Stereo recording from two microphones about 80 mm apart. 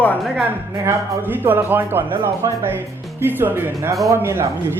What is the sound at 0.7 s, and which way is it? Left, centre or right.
Speech, right.